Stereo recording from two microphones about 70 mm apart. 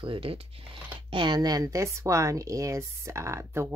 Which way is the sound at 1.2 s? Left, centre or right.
Right.